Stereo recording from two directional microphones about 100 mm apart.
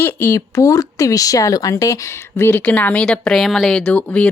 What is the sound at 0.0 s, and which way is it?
A woman's voice, 25° left (ahead or behind).